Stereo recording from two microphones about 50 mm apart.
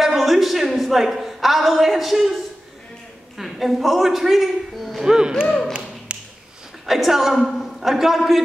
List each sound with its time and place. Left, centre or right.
0.0 s a woman's voice: centre
5.0 s speech: centre
6.1 s a sound: right
6.9 s a man's voice: centre